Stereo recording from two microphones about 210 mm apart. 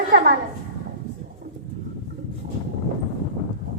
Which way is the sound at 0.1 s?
50° right (ahead or behind).